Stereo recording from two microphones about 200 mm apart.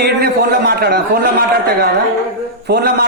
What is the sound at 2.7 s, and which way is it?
Speech, 55° right (ahead or behind).